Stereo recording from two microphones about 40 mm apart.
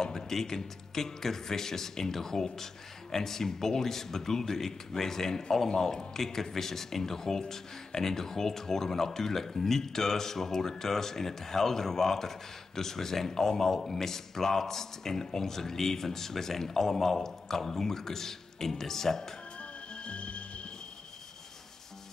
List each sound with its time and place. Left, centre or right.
0.0 s speech: centre
19.6 s music: left